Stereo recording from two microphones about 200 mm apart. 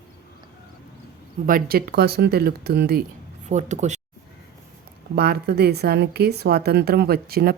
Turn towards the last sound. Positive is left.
turn(degrees=-50)  # may be behind; listen again after turning